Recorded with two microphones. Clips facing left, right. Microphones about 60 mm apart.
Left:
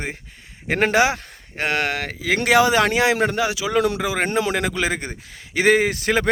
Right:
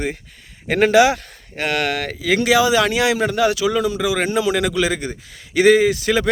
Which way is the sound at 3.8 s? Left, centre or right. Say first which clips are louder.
Left 1 dB; left.